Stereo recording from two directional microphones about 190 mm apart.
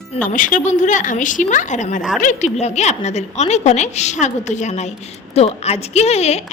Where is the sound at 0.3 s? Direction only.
45° left (ahead or behind).